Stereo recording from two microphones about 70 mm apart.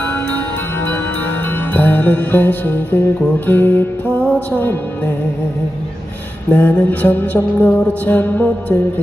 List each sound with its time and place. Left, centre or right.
0.0 s music: left
1.7 s music: left
3.4 s mantra: left
4.2 s music: left
6.5 s mantra: left